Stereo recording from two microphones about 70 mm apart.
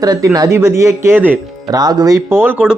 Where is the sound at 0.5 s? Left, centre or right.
Right.